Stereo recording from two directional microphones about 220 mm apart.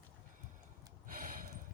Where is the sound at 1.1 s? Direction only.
40° right (ahead or behind).